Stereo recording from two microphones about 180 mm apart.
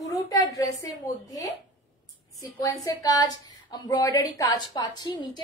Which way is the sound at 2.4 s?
20° left (ahead or behind).